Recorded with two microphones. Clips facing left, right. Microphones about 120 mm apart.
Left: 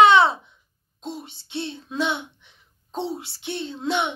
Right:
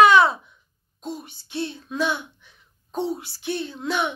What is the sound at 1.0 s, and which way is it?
A child's voice, 25° left (ahead or behind).